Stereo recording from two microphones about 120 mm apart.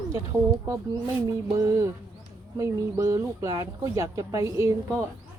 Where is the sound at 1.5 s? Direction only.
25° right (ahead or behind).